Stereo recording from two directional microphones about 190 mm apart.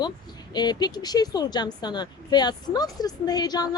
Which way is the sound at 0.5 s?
20° left (ahead or behind).